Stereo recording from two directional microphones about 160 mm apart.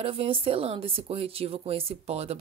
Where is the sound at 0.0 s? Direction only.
35° right (ahead or behind).